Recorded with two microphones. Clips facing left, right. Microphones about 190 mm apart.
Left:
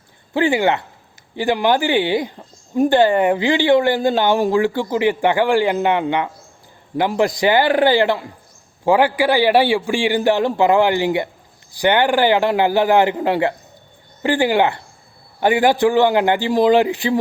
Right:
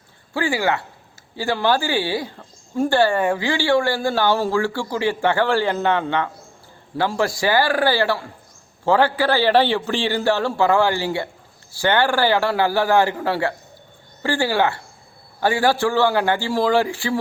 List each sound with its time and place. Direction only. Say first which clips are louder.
0.3 s a man's voice: left 5 dB; 20° left (ahead or behind)